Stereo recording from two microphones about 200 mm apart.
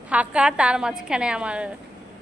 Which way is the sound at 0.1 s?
5° right (ahead or behind).